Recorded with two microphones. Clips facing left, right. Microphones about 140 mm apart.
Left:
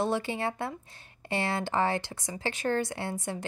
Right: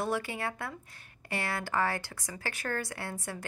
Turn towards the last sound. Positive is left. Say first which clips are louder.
# left 5 dB
turn(degrees=20)  # may be behind; listen again after turning